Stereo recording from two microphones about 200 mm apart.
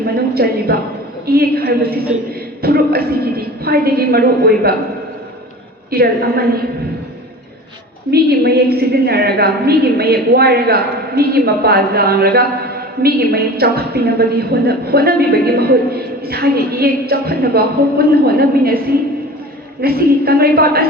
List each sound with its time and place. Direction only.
0.0 s a sound: 50° right (ahead or behind)
1.3 s a woman's voice: 50° right (ahead or behind)
2.6 s a sound: 50° right (ahead or behind)
5.9 s a woman's voice: 50° right (ahead or behind)
8.1 s a woman's voice: 50° right (ahead or behind)
19.8 s a woman's voice: 50° right (ahead or behind)